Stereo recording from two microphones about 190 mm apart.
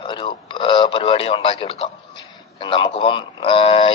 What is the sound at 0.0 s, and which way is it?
Radio, 25° left (ahead or behind).